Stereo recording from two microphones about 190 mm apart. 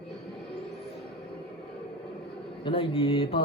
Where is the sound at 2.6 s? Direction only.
30° left (ahead or behind).